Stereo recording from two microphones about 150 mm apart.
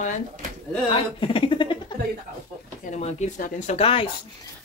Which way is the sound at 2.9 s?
50° left (ahead or behind).